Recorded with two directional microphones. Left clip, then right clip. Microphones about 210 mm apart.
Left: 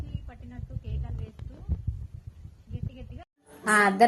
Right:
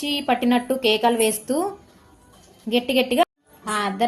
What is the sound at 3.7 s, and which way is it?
Speech, centre (ahead or behind).